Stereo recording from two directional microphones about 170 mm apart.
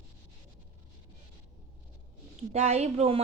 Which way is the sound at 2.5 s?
40° right (ahead or behind).